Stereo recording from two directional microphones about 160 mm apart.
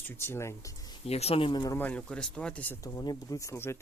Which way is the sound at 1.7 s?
10° left (ahead or behind).